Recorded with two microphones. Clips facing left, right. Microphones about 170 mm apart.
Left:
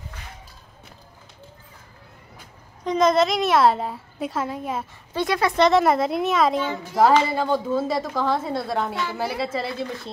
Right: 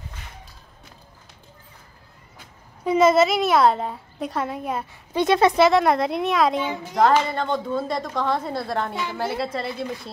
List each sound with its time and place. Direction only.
2.8 s a child's voice: 5° right (ahead or behind)
5.1 s speech: 20° right (ahead or behind)
5.6 s a child's voice: centre (ahead or behind)